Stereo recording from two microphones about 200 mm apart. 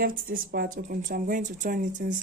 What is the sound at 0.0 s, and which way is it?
Speech, 45° right (ahead or behind).